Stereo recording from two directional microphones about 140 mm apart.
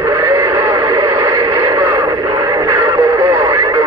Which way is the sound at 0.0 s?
20° right (ahead or behind).